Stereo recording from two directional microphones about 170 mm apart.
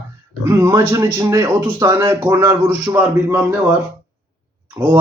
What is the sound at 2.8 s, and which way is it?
Speech, 10° right (ahead or behind).